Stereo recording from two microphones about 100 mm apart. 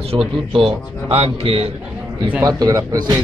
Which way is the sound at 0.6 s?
75° right (ahead or behind).